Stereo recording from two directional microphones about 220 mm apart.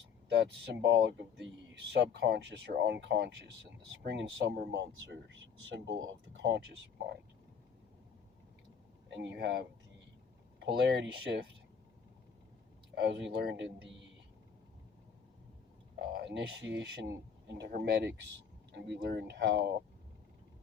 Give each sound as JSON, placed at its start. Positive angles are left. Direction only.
{"t": 0.7, "sound": "speech", "side_deg": -50}
{"t": 9.0, "sound": "speech", "side_deg": -55}
{"t": 10.8, "sound": "speech", "side_deg": -50}
{"t": 12.9, "sound": "speech", "side_deg": -50}
{"t": 16.0, "sound": "speech", "side_deg": -55}